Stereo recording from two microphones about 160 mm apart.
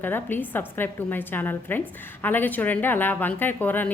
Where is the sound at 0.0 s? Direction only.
10° left (ahead or behind).